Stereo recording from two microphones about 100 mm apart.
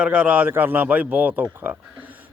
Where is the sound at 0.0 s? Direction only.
10° right (ahead or behind).